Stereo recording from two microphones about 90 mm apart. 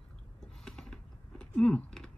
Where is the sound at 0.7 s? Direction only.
5° left (ahead or behind).